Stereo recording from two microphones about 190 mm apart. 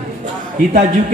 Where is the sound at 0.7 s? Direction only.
40° right (ahead or behind).